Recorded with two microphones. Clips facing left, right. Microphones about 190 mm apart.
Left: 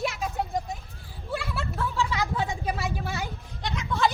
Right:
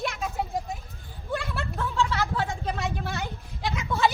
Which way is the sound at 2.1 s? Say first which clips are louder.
Even; 15° left (ahead or behind).